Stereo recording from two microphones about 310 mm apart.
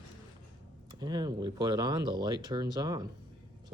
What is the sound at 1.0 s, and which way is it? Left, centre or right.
Speech, centre.